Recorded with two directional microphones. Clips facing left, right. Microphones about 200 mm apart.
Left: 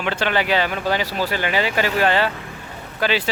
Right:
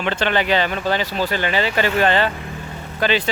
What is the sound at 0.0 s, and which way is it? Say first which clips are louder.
Speech: right 1 dB; 10° left (ahead or behind).